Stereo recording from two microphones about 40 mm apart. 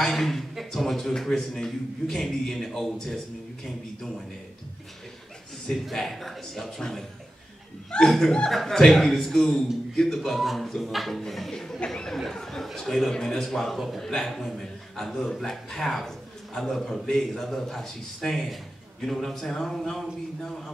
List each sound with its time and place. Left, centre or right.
0.0 s a man's voice: centre
5.7 s a man's voice: centre
7.9 s speech: left
8.5 s a man's voice: centre